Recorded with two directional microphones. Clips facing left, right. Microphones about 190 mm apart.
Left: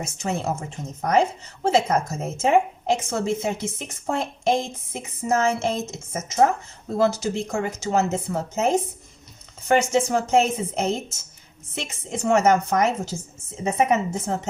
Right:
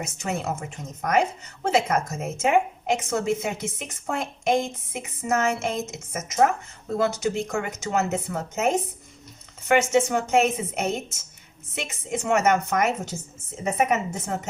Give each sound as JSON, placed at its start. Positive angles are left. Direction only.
{"t": 0.0, "sound": "a woman's voice", "side_deg": 30}